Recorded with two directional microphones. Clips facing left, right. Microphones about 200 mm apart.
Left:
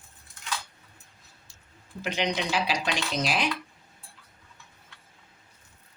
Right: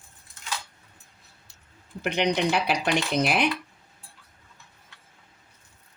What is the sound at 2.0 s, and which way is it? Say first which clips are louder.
Speech: right 5 dB; 60° right (ahead or behind).